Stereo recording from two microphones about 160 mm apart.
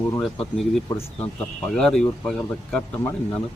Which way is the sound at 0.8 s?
15° left (ahead or behind).